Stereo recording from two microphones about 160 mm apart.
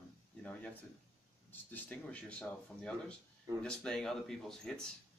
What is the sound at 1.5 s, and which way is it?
Speech, 10° left (ahead or behind).